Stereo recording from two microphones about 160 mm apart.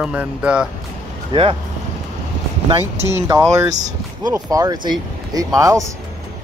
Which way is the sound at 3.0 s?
20° right (ahead or behind).